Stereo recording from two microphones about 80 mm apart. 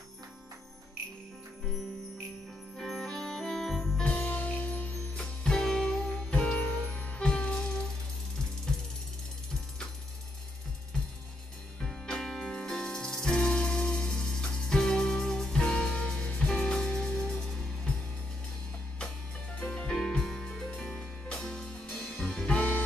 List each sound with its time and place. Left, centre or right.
2.8 s music: centre
4.0 s music: centre
11.8 s music: centre
19.6 s music: centre
21.9 s music: left